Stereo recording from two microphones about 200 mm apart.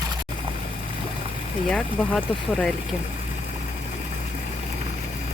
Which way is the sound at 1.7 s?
5° left (ahead or behind).